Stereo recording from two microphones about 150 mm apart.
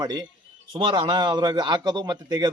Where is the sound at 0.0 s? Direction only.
30° right (ahead or behind).